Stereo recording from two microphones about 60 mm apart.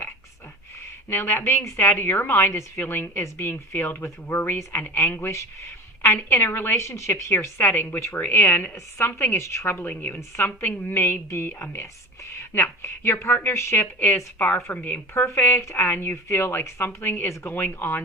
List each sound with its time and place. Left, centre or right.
1.1 s a woman's voice: left
1.7 s a woman's voice: left
4.5 s a woman's voice: left
6.3 s a woman's voice: left
7.9 s a woman's voice: left
8.1 s a woman's voice: left
9.6 s a woman's voice: left
14.3 s a woman's voice: left
15.3 s a woman's voice: left